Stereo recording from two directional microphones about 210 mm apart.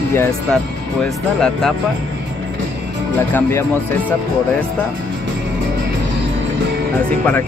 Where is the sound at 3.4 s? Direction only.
10° left (ahead or behind).